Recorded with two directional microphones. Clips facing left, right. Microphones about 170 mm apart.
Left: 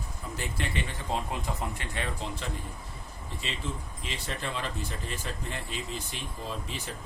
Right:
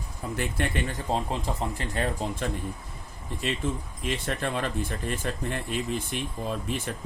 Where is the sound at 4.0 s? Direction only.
55° right (ahead or behind).